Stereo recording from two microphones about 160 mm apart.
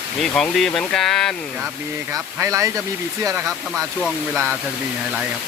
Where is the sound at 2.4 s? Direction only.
20° right (ahead or behind).